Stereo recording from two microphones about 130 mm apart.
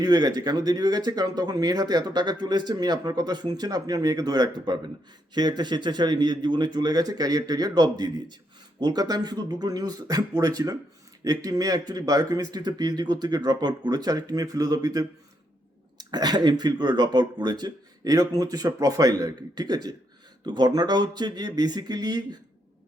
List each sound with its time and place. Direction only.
0.0 s speech: 30° right (ahead or behind)